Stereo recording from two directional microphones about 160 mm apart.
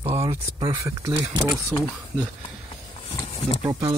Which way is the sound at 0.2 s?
30° right (ahead or behind).